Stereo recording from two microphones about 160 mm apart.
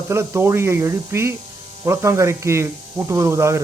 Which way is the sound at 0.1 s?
15° right (ahead or behind).